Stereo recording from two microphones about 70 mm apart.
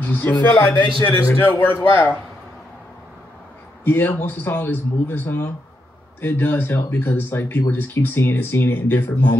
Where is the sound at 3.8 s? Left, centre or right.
Left.